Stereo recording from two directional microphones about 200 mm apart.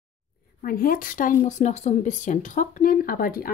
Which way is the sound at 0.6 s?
45° left (ahead or behind).